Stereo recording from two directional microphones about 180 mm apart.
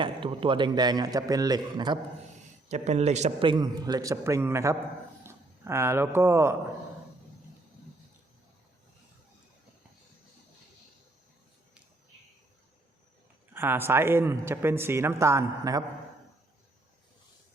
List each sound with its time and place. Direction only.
0.0 s a man's voice: 30° right (ahead or behind)
2.6 s a man's voice: 40° right (ahead or behind); by 4.8 s 15° right (ahead or behind)
5.2 s a sound: 15° right (ahead or behind)
6.1 s speech: 15° right (ahead or behind)
13.5 s speech: 10° right (ahead or behind)